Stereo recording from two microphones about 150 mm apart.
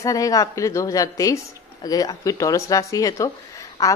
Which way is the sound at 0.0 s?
25° left (ahead or behind).